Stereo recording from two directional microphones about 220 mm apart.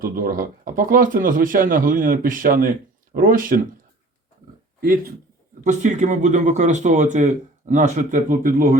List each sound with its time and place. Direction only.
0.0 s speech: 40° right (ahead or behind)
4.8 s speech: 40° right (ahead or behind)